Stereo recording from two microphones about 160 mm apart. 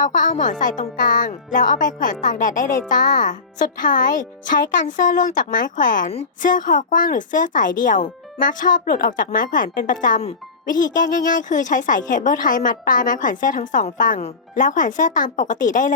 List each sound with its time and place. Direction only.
0.0 s a woman's voice: 55° left (ahead or behind)